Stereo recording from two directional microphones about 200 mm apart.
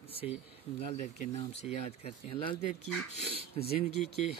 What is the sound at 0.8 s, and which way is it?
A man's voice, 30° left (ahead or behind).